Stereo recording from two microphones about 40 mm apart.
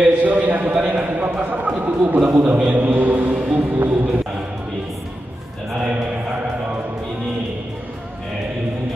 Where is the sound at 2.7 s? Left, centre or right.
Right.